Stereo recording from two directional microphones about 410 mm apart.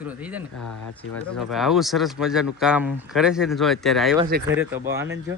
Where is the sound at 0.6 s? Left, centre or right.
Left.